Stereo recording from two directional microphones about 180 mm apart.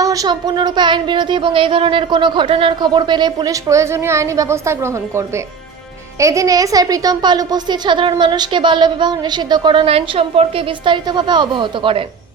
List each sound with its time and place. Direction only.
0.0 s speech: 20° right (ahead or behind)